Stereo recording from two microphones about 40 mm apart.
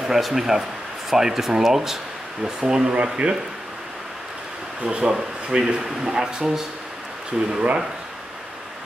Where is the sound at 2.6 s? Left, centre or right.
Right.